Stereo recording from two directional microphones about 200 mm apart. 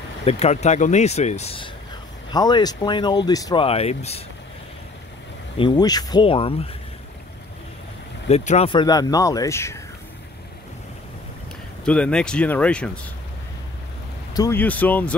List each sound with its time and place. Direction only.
0.2 s speech: 30° left (ahead or behind)
3.6 s speech: 30° left (ahead or behind)
5.6 s speech: 20° left (ahead or behind)
8.3 s speech: 30° left (ahead or behind); by 9.8 s 15° left (ahead or behind)
11.8 s speech: 5° left (ahead or behind)
14.3 s speech: 15° left (ahead or behind)